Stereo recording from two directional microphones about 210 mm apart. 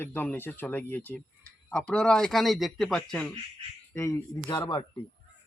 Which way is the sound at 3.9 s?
15° left (ahead or behind).